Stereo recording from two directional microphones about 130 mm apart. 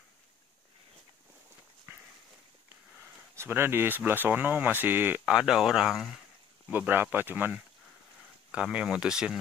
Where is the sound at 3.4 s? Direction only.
15° right (ahead or behind); by 6.0 s centre (ahead or behind).